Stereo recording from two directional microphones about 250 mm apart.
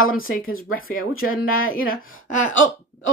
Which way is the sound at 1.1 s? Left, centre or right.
Left.